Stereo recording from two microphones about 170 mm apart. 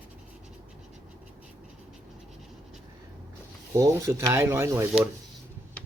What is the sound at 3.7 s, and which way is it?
Speech, 20° right (ahead or behind).